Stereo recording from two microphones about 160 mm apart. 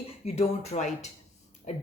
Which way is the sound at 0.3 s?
40° left (ahead or behind).